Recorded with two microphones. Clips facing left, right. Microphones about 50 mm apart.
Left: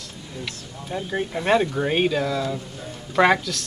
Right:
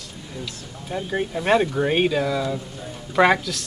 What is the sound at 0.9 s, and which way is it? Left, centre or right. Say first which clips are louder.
A man's voice: right 1 dB; centre.